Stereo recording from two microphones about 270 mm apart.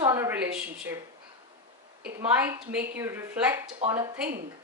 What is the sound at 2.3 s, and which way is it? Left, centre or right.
A woman's voice, centre.